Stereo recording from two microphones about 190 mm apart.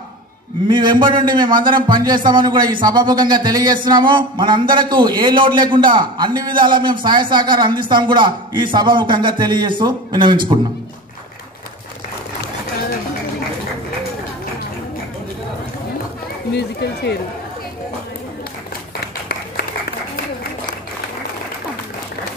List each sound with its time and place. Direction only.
0.7 s a man's voice: 25° right (ahead or behind)
16.5 s speech: 60° left (ahead or behind)